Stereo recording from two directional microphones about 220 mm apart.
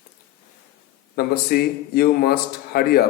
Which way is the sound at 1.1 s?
45° left (ahead or behind).